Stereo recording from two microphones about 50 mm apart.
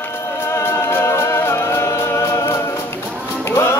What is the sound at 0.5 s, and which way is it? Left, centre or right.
Music, left.